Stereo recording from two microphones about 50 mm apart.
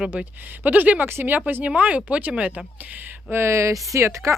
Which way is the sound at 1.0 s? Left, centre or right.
Right.